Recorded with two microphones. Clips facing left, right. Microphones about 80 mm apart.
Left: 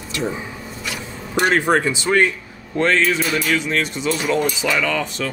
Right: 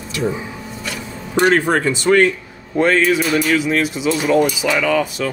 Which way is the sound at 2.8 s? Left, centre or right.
Centre.